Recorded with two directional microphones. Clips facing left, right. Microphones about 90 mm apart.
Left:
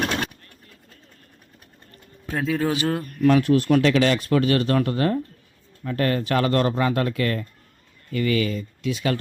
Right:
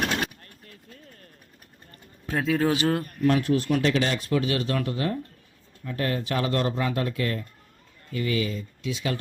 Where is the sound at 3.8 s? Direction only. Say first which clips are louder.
Left 5 dB; 90° left.